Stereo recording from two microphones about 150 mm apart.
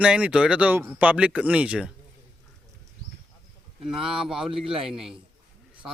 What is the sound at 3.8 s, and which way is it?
Speech, 5° right (ahead or behind).